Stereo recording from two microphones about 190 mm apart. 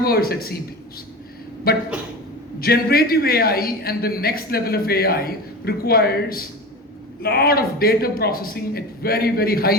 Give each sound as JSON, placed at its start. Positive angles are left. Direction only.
{"t": 0.0, "sound": "a man's voice", "side_deg": 55}
{"t": 1.7, "sound": "a man's voice", "side_deg": 55}